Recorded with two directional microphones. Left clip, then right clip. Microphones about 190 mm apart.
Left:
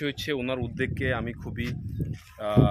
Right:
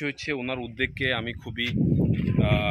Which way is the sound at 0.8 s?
5° left (ahead or behind).